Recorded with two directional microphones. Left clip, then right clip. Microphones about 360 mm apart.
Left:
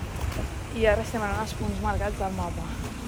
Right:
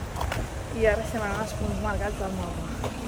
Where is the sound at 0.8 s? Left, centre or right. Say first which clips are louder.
Left 1 dB; centre.